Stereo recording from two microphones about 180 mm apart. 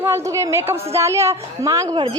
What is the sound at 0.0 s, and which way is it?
A woman's voice, 15° right (ahead or behind).